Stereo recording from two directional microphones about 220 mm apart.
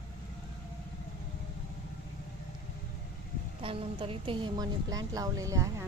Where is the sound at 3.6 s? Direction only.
25° right (ahead or behind).